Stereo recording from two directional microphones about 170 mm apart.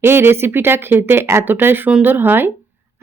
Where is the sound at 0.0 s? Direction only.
15° right (ahead or behind).